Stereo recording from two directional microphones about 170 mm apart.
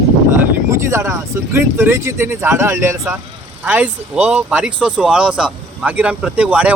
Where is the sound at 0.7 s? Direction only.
15° right (ahead or behind).